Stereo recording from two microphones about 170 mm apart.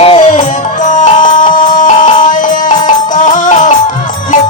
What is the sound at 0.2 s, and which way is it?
Music, 45° left (ahead or behind).